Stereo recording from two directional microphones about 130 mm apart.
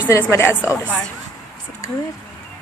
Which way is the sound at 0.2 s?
20° left (ahead or behind).